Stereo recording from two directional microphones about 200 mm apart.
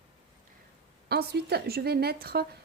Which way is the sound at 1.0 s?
55° right (ahead or behind).